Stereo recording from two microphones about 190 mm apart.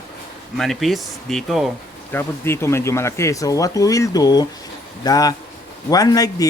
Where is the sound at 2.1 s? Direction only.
15° left (ahead or behind).